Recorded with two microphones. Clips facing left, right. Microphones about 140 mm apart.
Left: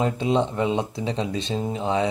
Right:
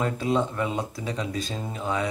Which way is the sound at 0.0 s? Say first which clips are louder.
Left 3 dB; 25° left (ahead or behind).